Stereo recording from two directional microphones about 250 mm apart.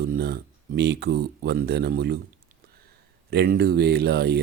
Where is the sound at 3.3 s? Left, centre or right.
Right.